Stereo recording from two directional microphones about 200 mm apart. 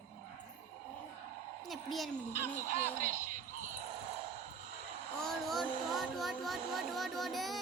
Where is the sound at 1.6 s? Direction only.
Centre (ahead or behind).